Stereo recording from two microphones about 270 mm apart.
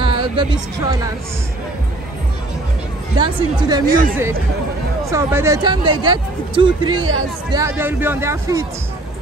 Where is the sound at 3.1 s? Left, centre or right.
Centre.